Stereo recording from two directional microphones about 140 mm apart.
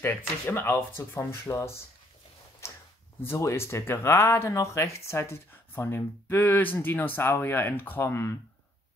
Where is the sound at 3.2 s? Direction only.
15° left (ahead or behind).